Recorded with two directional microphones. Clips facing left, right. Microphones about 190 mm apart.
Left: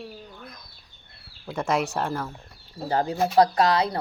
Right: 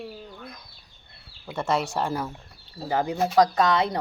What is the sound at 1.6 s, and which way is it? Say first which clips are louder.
Speech: left 1 dB; 10° left (ahead or behind).